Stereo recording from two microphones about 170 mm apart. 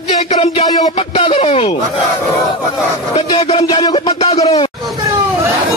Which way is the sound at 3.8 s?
35° left (ahead or behind).